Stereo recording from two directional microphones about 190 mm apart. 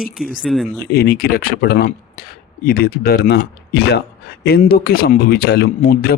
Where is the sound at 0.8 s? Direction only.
55° left (ahead or behind).